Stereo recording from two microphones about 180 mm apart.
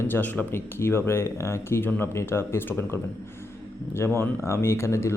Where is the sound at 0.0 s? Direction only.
10° left (ahead or behind).